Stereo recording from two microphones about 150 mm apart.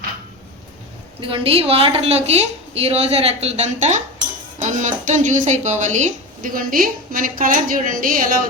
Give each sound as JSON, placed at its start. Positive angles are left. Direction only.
{"t": 1.2, "sound": "a woman's voice", "side_deg": -40}